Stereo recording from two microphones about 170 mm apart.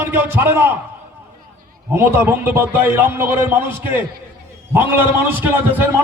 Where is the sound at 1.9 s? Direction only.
10° right (ahead or behind).